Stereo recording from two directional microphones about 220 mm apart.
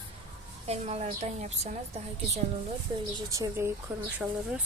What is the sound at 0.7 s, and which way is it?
A woman's voice, 30° right (ahead or behind).